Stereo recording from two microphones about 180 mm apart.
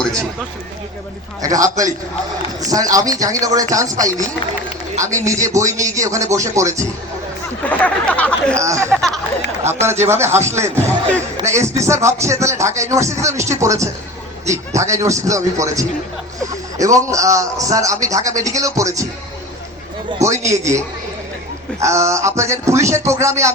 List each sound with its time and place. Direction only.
1.4 s speech: 20° right (ahead or behind)
5.2 s a man's voice: 15° right (ahead or behind)
7.6 s a sound: 5° left (ahead or behind)
8.5 s a man's voice: 15° right (ahead or behind)
8.9 s speech: centre (ahead or behind)
9.6 s a man's voice: 15° right (ahead or behind)
10.8 s speech: 10° left (ahead or behind)
11.3 s a man's voice: 15° right (ahead or behind)
20.2 s a man's voice: 15° right (ahead or behind)